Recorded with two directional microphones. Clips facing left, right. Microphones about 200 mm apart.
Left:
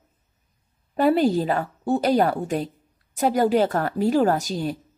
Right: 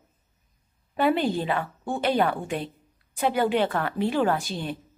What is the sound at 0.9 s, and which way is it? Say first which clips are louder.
A woman's voice: left 5 dB; 40° left (ahead or behind).